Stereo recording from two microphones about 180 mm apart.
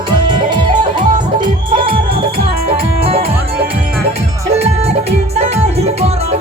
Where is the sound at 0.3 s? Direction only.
25° right (ahead or behind).